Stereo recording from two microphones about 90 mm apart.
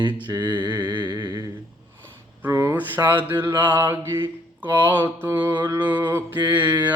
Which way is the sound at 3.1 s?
20° right (ahead or behind).